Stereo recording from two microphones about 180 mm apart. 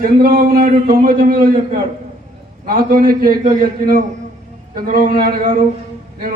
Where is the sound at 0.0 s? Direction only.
55° right (ahead or behind).